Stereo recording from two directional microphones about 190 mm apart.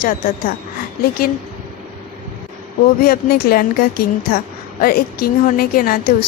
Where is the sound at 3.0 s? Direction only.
50° left (ahead or behind).